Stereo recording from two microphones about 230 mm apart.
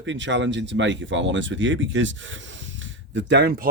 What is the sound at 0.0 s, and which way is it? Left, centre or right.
Speech, right.